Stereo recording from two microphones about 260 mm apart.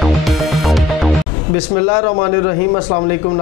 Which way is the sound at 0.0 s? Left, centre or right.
Centre.